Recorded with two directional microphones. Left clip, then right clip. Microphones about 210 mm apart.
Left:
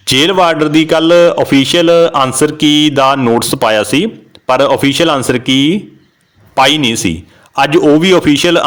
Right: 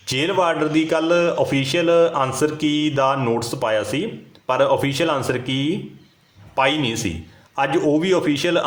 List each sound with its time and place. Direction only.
0.0 s a man's voice: 40° left (ahead or behind)